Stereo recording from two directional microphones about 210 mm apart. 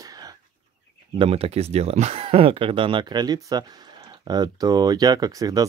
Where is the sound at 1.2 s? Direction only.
30° right (ahead or behind).